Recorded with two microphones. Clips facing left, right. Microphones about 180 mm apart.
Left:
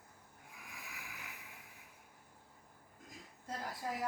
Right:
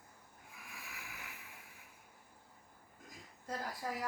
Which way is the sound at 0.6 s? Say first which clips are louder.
Even; 15° left (ahead or behind).